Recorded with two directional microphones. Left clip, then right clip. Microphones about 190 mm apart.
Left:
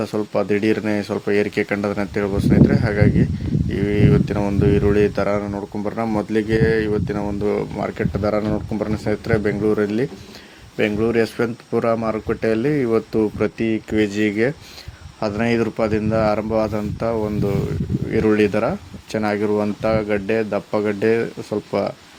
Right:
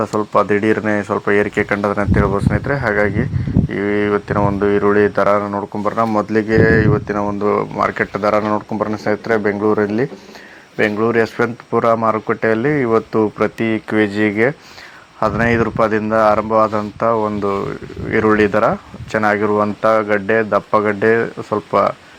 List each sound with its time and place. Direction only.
0.1 s speech: 15° left (ahead or behind)